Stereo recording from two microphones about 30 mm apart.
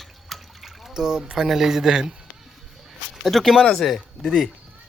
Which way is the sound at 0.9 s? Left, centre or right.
Centre.